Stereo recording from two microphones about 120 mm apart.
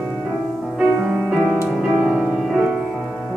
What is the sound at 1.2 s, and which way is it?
Music, 5° right (ahead or behind).